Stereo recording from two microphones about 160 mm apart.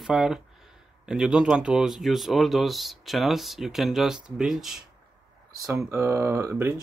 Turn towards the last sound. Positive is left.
turn(degrees=-15)  # may be behind; listen again after turning